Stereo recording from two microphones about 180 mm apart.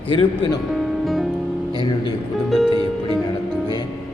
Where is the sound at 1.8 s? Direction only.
25° left (ahead or behind).